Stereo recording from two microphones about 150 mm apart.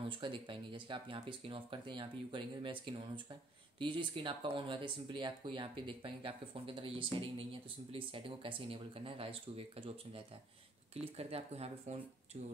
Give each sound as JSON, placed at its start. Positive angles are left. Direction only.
{"t": 0.1, "sound": "speech", "side_deg": -35}
{"t": 3.8, "sound": "speech", "side_deg": -35}